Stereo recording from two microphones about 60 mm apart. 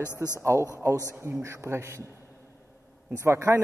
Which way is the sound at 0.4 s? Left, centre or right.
Right.